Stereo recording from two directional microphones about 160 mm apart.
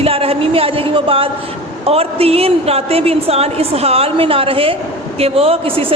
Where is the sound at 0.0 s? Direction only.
35° right (ahead or behind).